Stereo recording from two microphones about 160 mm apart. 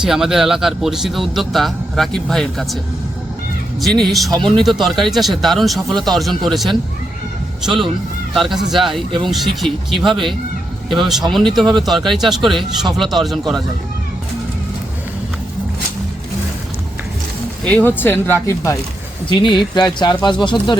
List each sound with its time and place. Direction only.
0.0 s speech: 5° right (ahead or behind)
3.8 s speech: centre (ahead or behind)
17.7 s speech: 10° left (ahead or behind); by 20.7 s 30° left (ahead or behind)